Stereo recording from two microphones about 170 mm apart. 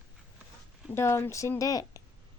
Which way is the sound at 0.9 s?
15° left (ahead or behind).